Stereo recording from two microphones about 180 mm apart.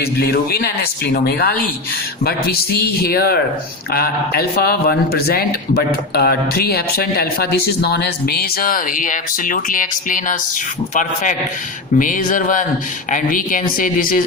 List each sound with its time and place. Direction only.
0.0 s a man's voice: 60° left (ahead or behind)